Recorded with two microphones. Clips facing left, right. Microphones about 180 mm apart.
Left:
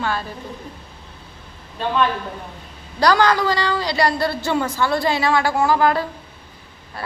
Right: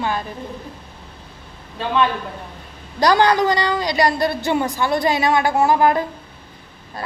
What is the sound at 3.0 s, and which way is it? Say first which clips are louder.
A woman's voice: right 1 dB; 20° right (ahead or behind).